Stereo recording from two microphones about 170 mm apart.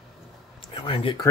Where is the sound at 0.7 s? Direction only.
30° left (ahead or behind).